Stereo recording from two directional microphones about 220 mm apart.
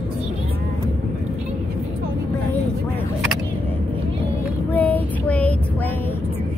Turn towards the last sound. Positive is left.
turn(degrees=5)  # may be behind; listen again after turning